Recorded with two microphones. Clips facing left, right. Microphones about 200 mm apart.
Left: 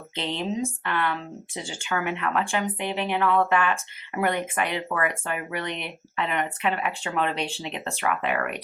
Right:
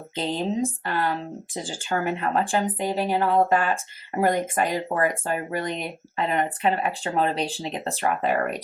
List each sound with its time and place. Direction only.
0.2 s speech: 35° right (ahead or behind)